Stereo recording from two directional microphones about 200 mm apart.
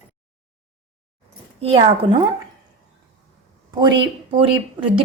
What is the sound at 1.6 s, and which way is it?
Speech, 30° right (ahead or behind).